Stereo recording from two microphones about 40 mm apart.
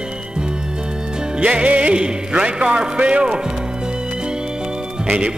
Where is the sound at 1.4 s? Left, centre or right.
Right.